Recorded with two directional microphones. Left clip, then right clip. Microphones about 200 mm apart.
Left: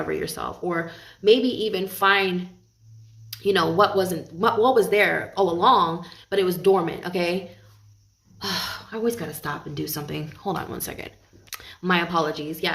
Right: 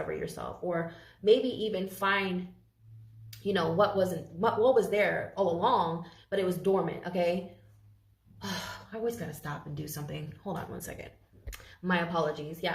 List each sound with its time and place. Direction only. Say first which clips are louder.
0.1 s a woman's voice: left 8 dB; 40° left (ahead or behind)
3.4 s speech: left 8 dB; 40° left (ahead or behind)
8.4 s speech: left 10 dB; 40° left (ahead or behind)